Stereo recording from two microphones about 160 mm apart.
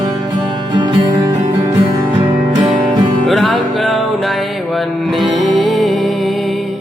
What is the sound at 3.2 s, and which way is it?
Music, centre (ahead or behind).